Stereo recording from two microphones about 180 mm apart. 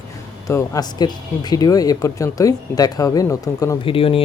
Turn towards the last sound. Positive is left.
turn(degrees=30)  # may be behind; listen again after turning